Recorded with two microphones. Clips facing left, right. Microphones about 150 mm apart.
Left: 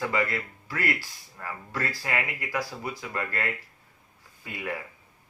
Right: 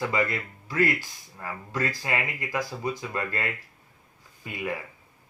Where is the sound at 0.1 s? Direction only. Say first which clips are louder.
Right 1 dB; 20° right (ahead or behind).